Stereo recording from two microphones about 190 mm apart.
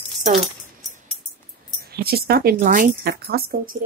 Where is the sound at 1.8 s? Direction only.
55° right (ahead or behind).